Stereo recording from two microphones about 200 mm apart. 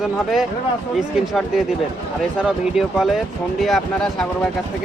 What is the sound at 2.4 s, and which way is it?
A man's voice, centre (ahead or behind).